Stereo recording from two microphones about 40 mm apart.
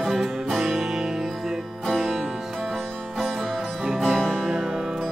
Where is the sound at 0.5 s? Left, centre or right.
Centre.